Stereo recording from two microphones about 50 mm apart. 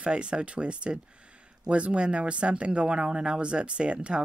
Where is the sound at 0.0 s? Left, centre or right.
Right.